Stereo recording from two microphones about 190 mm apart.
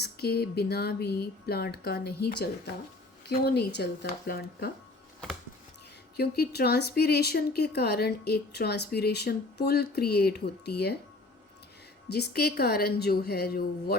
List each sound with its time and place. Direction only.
0.0 s speech: 55° left (ahead or behind)
6.1 s speech: 55° left (ahead or behind)
12.0 s speech: 60° left (ahead or behind)